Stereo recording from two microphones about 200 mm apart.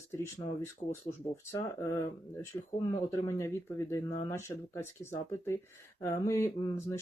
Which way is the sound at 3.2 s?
15° left (ahead or behind).